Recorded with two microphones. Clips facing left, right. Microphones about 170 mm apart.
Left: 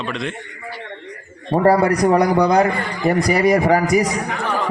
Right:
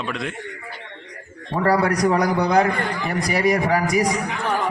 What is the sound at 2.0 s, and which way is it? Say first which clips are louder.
Speech: left 4 dB; 60° left (ahead or behind).